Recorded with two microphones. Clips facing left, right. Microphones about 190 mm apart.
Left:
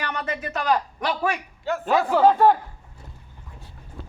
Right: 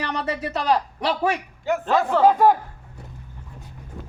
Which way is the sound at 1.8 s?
5° left (ahead or behind).